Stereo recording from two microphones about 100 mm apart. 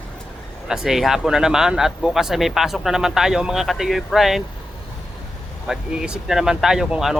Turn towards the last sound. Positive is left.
turn(degrees=-5)  # may be behind; listen again after turning